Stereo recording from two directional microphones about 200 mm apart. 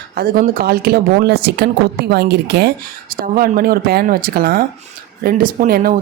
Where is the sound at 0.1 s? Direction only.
45° right (ahead or behind).